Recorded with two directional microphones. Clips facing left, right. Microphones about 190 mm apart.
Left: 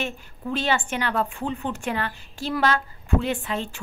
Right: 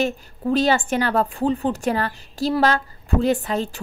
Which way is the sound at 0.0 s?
40° right (ahead or behind).